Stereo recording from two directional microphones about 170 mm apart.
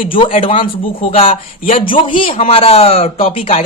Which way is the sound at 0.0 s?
30° left (ahead or behind).